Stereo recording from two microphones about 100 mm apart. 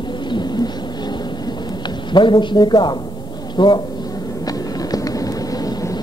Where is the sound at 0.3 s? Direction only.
45° left (ahead or behind).